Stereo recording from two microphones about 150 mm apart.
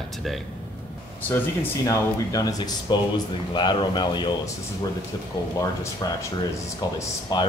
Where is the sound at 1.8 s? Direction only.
25° left (ahead or behind).